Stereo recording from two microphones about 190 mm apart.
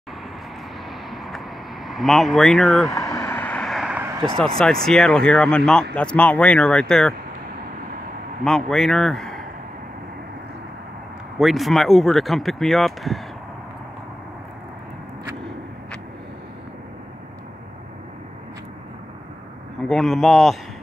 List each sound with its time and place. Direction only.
1.1 s vehicle: centre (ahead or behind)
1.9 s speech: centre (ahead or behind)
3.1 s vehicle: 15° left (ahead or behind); by 4.2 s 10° right (ahead or behind)
4.4 s speech: 5° left (ahead or behind)
8.5 s speech: 5° left (ahead or behind)
11.3 s speech: centre (ahead or behind)
19.9 s speech: 5° left (ahead or behind)